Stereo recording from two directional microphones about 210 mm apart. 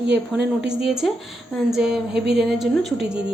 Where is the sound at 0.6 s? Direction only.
5° right (ahead or behind).